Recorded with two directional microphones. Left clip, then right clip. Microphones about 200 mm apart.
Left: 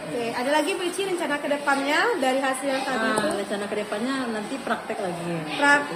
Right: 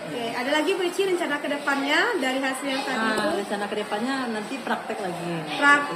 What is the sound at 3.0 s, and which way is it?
A woman's voice, 25° right (ahead or behind).